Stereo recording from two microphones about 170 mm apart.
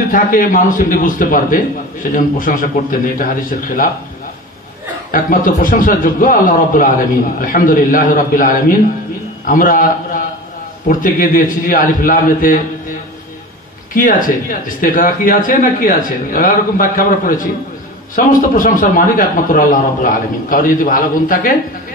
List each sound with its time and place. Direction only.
0.1 s a man's voice: 55° left (ahead or behind)
5.1 s a man's voice: 55° left (ahead or behind)
13.9 s a man's voice: 55° left (ahead or behind)